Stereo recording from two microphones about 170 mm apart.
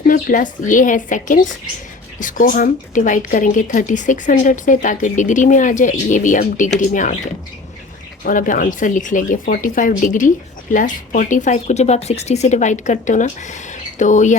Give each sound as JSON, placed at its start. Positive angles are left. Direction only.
{"t": 0.1, "sound": "speech", "side_deg": 50}
{"t": 8.2, "sound": "speech", "side_deg": 50}